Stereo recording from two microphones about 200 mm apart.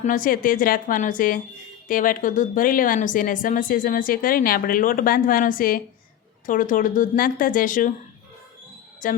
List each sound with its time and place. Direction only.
0.0 s a woman's voice: 40° left (ahead or behind)
9.0 s speech: 40° left (ahead or behind)